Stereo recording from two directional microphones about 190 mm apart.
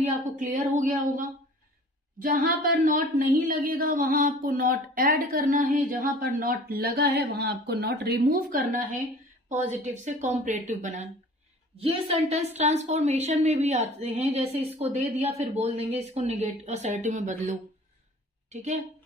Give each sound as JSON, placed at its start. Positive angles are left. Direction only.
{"t": 0.0, "sound": "speech", "side_deg": -40}
{"t": 9.5, "sound": "a woman's voice", "side_deg": -35}